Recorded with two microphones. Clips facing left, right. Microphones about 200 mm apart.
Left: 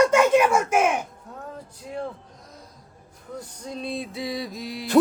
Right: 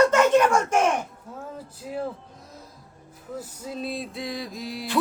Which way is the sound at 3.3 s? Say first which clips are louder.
Right 1 dB; 5° right (ahead or behind).